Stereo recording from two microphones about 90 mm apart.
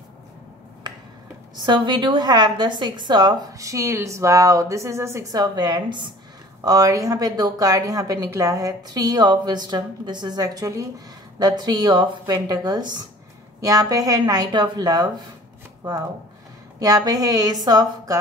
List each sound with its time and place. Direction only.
1.7 s a woman's voice: 60° right (ahead or behind)
3.6 s speech: 35° right (ahead or behind)
5.4 s a woman's voice: 50° right (ahead or behind)
6.6 s a woman's voice: 45° right (ahead or behind)
13.6 s a woman's voice: 40° right (ahead or behind)
16.8 s a woman's voice: 45° right (ahead or behind)